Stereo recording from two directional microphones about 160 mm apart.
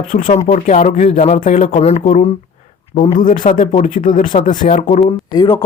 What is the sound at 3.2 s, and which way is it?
Speech, 55° left (ahead or behind).